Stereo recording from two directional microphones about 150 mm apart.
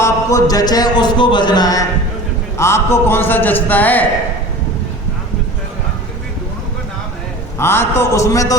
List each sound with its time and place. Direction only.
0.0 s a man's voice: 20° left (ahead or behind)
7.6 s a man's voice: 15° left (ahead or behind)